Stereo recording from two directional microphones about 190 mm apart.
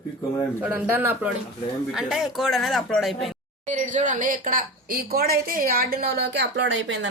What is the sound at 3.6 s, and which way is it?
Speech, 40° right (ahead or behind).